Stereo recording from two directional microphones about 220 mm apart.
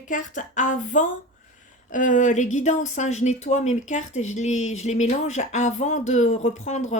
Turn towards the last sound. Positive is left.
turn(degrees=30)  # may be behind; listen again after turning